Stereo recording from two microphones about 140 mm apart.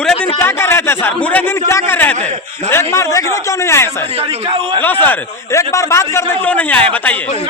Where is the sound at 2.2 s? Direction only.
55° right (ahead or behind).